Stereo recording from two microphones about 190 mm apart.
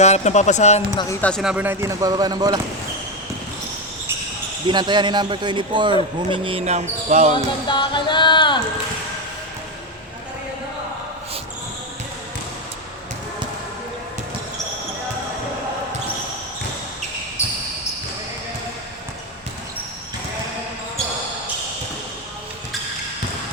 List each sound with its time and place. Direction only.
0.0 s speech: 35° left (ahead or behind)
1.2 s speech: centre (ahead or behind); by 2.6 s 20° right (ahead or behind)
4.7 s a man's voice: 25° right (ahead or behind)
7.7 s music: 25° left (ahead or behind)